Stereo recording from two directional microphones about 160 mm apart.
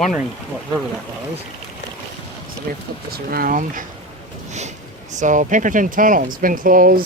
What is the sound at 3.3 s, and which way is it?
Speech, 65° right (ahead or behind).